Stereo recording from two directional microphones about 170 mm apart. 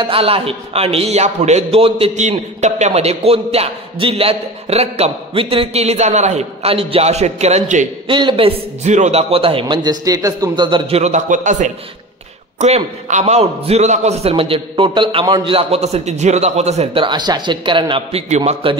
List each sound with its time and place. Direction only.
0.1 s a man's voice: 35° right (ahead or behind)
8.1 s a man's voice: 30° right (ahead or behind)